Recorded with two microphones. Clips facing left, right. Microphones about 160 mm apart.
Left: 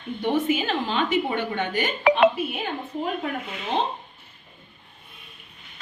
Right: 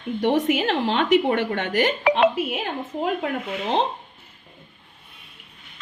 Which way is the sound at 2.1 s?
90° right.